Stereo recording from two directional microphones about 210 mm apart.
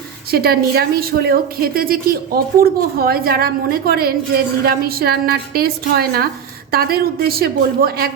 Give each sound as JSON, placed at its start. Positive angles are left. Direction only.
{"t": 0.3, "sound": "a woman's voice", "side_deg": -45}